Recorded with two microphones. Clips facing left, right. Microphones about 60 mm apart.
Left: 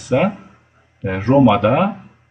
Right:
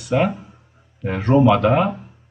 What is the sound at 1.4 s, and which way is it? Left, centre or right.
Speech, centre.